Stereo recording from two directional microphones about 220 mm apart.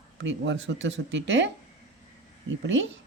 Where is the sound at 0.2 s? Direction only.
55° right (ahead or behind).